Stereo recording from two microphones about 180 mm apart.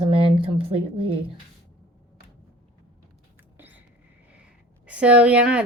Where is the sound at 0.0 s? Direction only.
30° right (ahead or behind).